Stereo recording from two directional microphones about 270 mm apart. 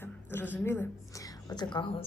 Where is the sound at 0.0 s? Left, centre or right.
Centre.